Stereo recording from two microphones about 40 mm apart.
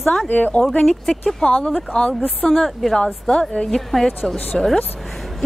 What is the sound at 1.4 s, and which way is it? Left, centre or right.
Speech, left.